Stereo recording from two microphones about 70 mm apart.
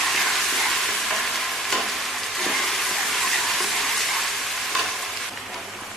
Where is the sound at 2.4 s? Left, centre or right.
Centre.